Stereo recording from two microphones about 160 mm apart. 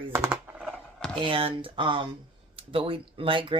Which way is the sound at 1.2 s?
35° right (ahead or behind).